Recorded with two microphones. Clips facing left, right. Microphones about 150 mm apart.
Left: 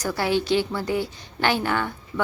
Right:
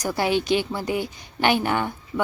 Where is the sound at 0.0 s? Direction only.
15° right (ahead or behind).